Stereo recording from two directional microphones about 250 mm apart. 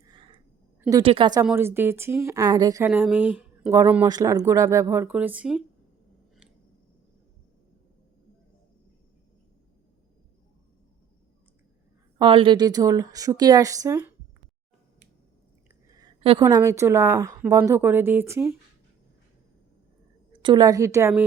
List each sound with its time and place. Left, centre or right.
0.0 s a sound: centre
0.8 s speech: centre
12.2 s speech: right
15.9 s speech: centre
20.4 s speech: centre